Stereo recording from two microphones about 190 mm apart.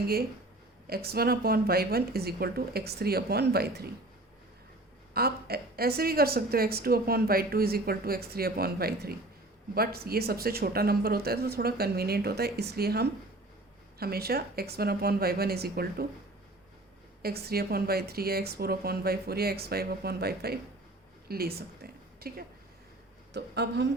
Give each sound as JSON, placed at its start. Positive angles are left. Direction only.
{"t": 0.9, "sound": "speech", "side_deg": -55}
{"t": 5.1, "sound": "a woman's voice", "side_deg": -55}
{"t": 17.2, "sound": "speech", "side_deg": -55}